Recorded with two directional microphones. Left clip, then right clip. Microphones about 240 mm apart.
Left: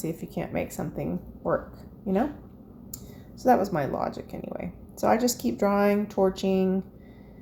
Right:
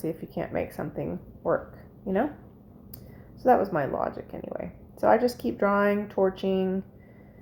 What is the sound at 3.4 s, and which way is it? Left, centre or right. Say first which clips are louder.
Speech: even; centre.